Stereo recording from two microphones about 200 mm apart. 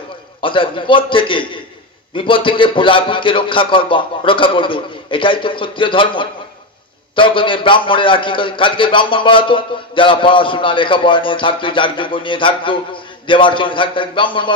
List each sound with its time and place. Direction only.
0.4 s a man's voice: 25° left (ahead or behind)